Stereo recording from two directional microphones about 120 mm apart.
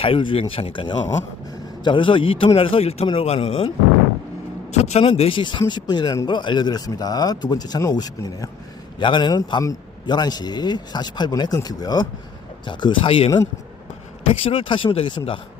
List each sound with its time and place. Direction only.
0.0 s a man's voice: 45° left (ahead or behind)
4.7 s a man's voice: 65° left (ahead or behind)
5.4 s a man's voice: 40° left (ahead or behind)